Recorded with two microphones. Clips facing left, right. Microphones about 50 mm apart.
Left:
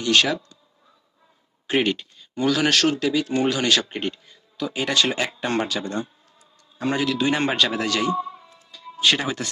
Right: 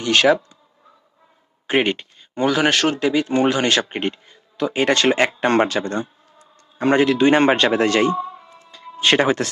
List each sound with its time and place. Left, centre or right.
0.0 s speech: right
1.6 s speech: right
4.5 s speech: right
5.4 s a sound: right
6.8 s speech: right
8.7 s music: right